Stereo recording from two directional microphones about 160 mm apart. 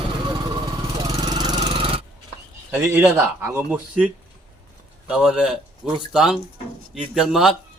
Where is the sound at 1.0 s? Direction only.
25° right (ahead or behind).